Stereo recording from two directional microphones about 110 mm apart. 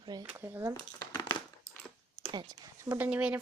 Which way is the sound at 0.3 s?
25° right (ahead or behind).